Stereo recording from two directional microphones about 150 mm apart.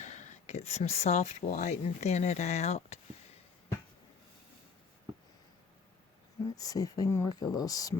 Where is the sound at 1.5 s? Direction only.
60° left (ahead or behind).